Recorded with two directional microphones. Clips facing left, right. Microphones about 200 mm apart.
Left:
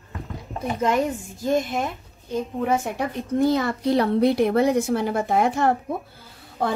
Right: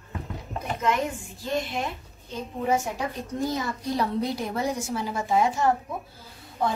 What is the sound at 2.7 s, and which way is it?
Speech, 60° left (ahead or behind).